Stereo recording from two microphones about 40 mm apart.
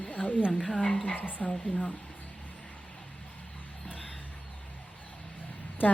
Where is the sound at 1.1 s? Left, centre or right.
Left.